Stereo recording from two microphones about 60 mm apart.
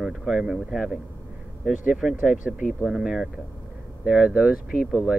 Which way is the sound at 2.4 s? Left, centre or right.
Centre.